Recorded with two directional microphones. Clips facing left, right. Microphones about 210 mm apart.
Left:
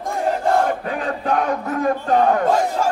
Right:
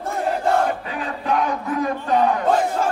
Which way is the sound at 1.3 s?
50° left (ahead or behind).